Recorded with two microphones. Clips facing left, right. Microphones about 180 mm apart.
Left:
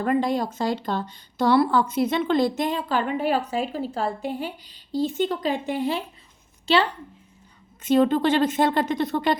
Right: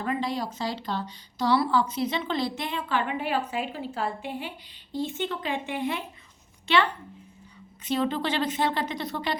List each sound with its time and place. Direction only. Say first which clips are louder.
0.0 s speech: left 6 dB; 50° left (ahead or behind)
7.9 s a woman's voice: left 8 dB; 50° left (ahead or behind)